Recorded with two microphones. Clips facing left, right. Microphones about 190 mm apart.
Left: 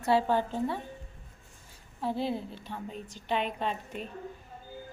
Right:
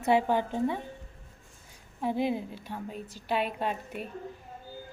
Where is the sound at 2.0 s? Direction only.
15° right (ahead or behind).